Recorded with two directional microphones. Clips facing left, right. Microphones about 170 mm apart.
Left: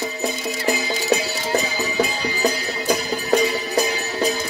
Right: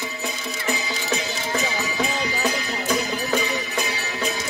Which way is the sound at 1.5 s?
35° left (ahead or behind).